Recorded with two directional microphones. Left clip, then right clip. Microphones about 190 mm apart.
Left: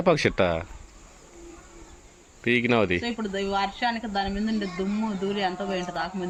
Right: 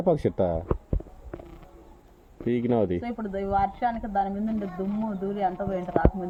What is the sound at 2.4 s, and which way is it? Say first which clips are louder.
Speech: left 3 dB; 15° right (ahead or behind).